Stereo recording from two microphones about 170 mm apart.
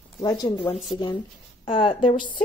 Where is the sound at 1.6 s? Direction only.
30° left (ahead or behind).